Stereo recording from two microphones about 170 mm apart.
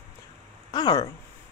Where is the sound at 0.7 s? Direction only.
25° left (ahead or behind).